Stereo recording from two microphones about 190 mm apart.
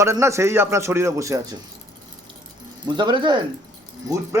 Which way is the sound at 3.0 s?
25° right (ahead or behind).